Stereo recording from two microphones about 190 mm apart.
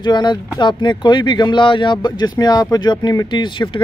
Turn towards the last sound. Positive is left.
turn(degrees=25)  # may be behind; listen again after turning